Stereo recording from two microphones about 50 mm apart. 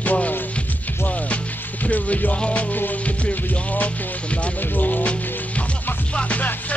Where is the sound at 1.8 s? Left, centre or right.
Left.